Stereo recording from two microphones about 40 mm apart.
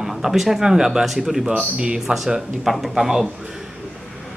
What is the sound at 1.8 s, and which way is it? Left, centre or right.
Speech, right.